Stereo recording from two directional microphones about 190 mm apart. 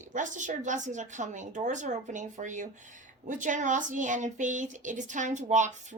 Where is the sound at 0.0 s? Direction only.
40° right (ahead or behind).